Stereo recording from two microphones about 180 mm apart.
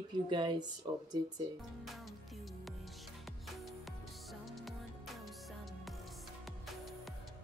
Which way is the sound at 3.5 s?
Centre (ahead or behind).